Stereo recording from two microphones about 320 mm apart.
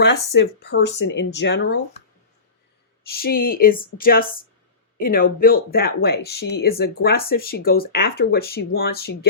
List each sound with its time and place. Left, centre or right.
0.3 s speech: left
3.1 s speech: left